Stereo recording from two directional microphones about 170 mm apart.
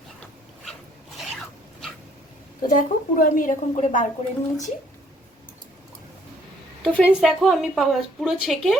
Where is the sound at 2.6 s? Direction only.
50° left (ahead or behind).